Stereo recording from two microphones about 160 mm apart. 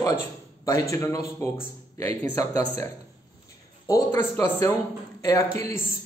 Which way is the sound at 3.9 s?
20° left (ahead or behind).